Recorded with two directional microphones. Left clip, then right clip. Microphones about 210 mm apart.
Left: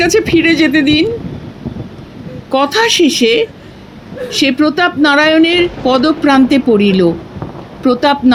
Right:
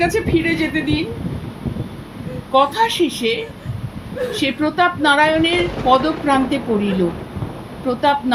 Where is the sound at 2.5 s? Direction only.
50° left (ahead or behind).